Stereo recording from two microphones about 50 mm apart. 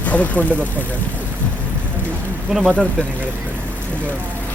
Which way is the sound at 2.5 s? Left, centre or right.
Centre.